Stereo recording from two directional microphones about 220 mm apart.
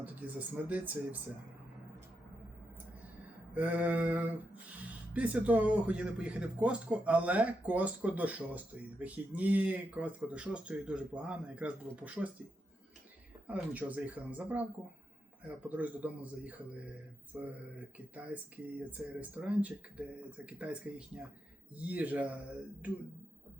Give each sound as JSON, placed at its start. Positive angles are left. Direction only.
{"t": 0.0, "sound": "speech", "side_deg": -5}
{"t": 3.5, "sound": "speech", "side_deg": -5}
{"t": 13.5, "sound": "speech", "side_deg": -5}
{"t": 21.8, "sound": "speech", "side_deg": -5}